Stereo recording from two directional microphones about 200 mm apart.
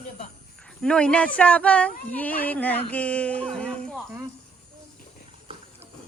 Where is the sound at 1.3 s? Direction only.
5° left (ahead or behind).